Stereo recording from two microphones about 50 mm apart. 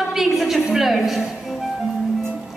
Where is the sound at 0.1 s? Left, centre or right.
Centre.